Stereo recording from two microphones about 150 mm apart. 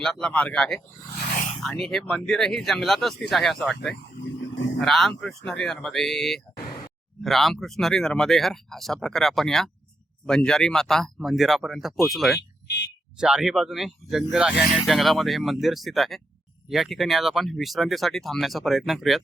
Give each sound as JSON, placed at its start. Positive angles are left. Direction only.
{"t": 0.0, "sound": "speech", "side_deg": 5}
{"t": 1.2, "sound": "a sound", "side_deg": 45}
{"t": 1.6, "sound": "speech", "side_deg": 0}
{"t": 4.8, "sound": "speech", "side_deg": 0}